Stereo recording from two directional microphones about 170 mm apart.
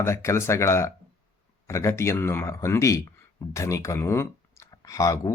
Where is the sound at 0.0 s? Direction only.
15° left (ahead or behind).